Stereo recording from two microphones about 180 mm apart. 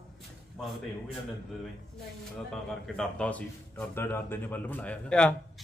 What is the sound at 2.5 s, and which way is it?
Speech, 5° left (ahead or behind).